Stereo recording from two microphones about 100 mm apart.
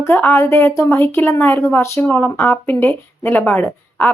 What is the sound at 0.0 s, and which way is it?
A woman's voice, 20° left (ahead or behind).